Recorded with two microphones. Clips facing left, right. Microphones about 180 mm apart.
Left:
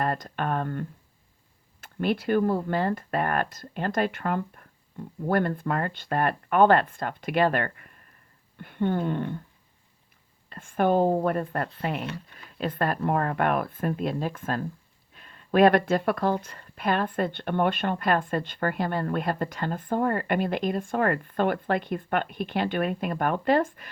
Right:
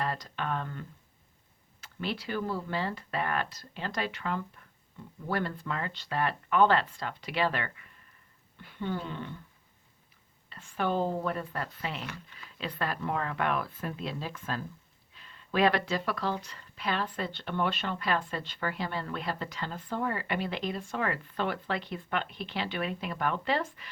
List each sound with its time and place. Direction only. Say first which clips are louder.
0.0 s speech: left 6 dB; 50° left (ahead or behind)
10.5 s speech: left 8 dB; 50° left (ahead or behind)